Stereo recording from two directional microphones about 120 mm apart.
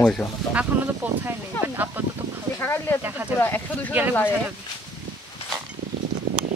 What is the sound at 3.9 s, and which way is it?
Speech, 15° right (ahead or behind).